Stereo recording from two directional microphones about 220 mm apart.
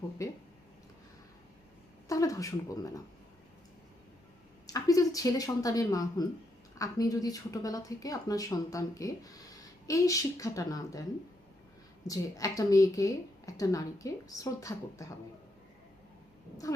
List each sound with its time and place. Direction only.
0.2 s a woman's voice: 15° left (ahead or behind)
2.0 s a woman's voice: 15° left (ahead or behind)
4.6 s a woman's voice: 15° left (ahead or behind)
12.0 s a woman's voice: 15° left (ahead or behind)